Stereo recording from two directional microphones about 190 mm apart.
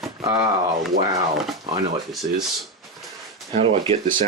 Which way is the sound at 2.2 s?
45° right (ahead or behind).